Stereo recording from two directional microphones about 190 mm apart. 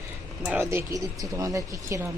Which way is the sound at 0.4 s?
10° right (ahead or behind).